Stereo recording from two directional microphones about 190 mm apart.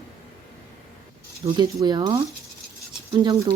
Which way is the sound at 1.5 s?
20° right (ahead or behind).